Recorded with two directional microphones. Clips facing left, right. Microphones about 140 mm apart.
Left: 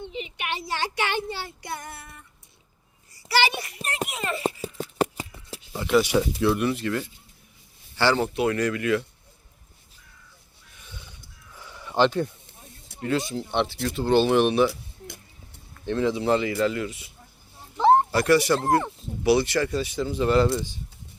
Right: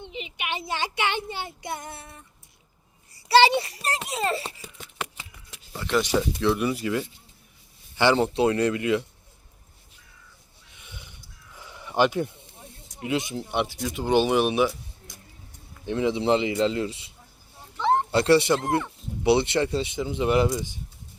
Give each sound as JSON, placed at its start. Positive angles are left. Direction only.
{"t": 0.1, "sound": "a child's voice", "side_deg": -15}
{"t": 3.2, "sound": "a child's voice", "side_deg": -30}
{"t": 4.6, "sound": "a sound", "side_deg": 40}
{"t": 5.9, "sound": "speech", "side_deg": 10}
{"t": 7.9, "sound": "speech", "side_deg": -20}
{"t": 10.8, "sound": "a sound", "side_deg": -20}
{"t": 13.0, "sound": "speech", "side_deg": -15}
{"t": 15.7, "sound": "speech", "side_deg": -15}
{"t": 17.7, "sound": "a sound", "side_deg": 35}
{"t": 18.1, "sound": "speech", "side_deg": -25}